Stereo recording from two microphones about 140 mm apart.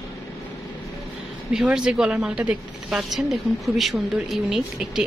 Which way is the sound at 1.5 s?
5° right (ahead or behind).